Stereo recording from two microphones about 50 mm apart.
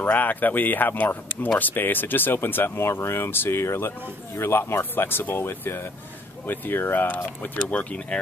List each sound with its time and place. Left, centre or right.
0.1 s speech: left
7.7 s speech: left